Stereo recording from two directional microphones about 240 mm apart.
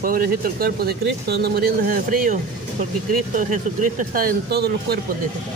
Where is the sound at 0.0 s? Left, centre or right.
Right.